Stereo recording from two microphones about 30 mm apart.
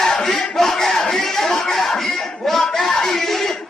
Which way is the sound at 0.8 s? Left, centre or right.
Centre.